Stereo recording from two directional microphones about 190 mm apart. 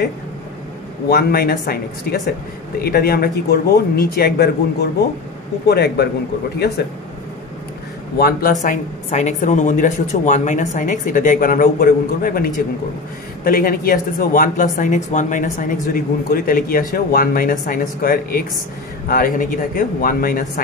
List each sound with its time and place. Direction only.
1.0 s speech: 50° left (ahead or behind)
8.2 s speech: 50° left (ahead or behind)